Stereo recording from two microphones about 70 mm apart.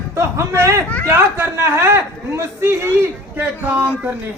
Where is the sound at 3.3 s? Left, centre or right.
Right.